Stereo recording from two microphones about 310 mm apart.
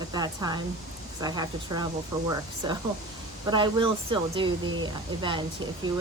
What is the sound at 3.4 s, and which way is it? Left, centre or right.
Speech, centre.